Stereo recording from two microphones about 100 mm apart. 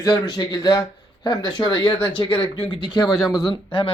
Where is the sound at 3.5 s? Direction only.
60° left (ahead or behind).